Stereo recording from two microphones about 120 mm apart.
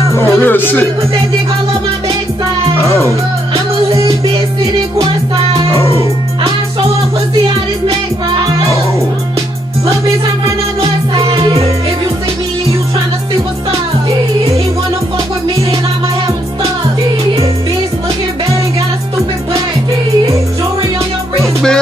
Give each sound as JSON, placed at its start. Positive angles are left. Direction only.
{"t": 0.1, "sound": "music", "side_deg": 15}
{"t": 10.8, "sound": "music", "side_deg": -50}